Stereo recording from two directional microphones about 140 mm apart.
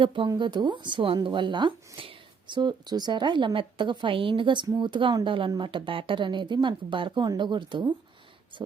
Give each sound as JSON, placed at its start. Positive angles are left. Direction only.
{"t": 0.0, "sound": "speech", "side_deg": -40}